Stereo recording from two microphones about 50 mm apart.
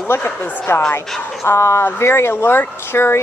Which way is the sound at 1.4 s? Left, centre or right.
Left.